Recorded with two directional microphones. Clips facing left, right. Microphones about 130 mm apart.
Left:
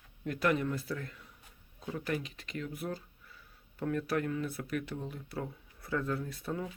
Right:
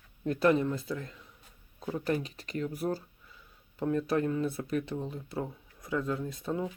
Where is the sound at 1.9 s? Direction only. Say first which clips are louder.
Right 4 dB; 35° right (ahead or behind).